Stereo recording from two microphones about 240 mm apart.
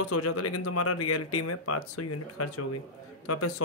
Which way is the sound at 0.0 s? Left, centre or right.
Left.